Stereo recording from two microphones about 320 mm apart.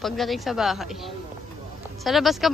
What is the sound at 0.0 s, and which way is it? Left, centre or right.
Speech, centre.